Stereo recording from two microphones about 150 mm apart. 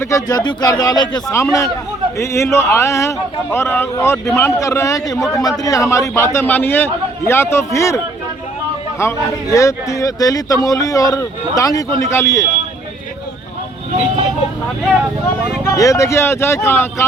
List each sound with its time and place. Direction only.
0.0 s a man's voice: 25° left (ahead or behind)
9.0 s speech: 20° left (ahead or behind)
15.6 s a man's voice: 20° left (ahead or behind)